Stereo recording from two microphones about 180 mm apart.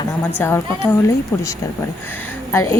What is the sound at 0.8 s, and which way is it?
Speech, 10° left (ahead or behind).